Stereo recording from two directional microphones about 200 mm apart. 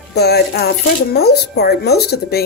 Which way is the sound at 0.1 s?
55° left (ahead or behind).